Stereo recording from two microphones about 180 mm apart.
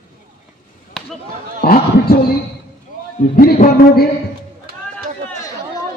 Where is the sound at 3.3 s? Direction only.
55° left (ahead or behind).